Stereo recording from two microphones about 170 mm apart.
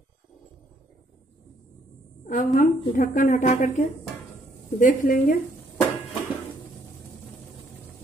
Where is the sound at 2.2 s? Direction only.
50° left (ahead or behind).